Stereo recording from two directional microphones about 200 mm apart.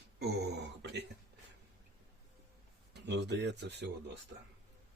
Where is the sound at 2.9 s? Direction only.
55° right (ahead or behind).